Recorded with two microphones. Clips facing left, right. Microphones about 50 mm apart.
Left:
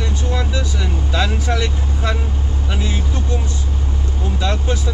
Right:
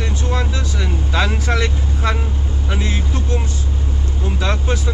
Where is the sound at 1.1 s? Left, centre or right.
Right.